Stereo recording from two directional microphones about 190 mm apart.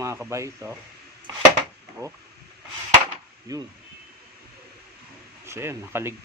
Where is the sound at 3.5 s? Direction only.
20° right (ahead or behind).